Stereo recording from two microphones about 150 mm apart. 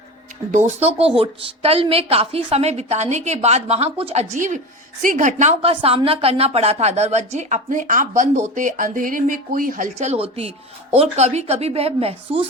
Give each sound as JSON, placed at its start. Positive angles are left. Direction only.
{"t": 0.7, "sound": "speech", "side_deg": -45}
{"t": 5.7, "sound": "a woman's voice", "side_deg": -40}